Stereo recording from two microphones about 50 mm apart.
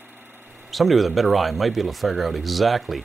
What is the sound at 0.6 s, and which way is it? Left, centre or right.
Speech, centre.